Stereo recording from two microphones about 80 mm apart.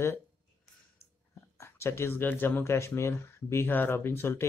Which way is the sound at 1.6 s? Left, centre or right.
Left.